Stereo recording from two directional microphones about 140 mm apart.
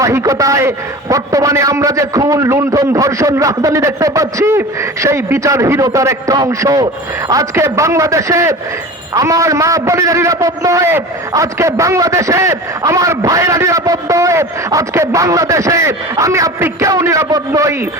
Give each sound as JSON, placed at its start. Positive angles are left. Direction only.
{"t": 0.0, "sound": "a man's voice", "side_deg": -20}